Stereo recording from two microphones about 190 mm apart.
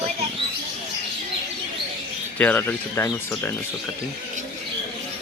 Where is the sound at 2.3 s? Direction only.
10° left (ahead or behind).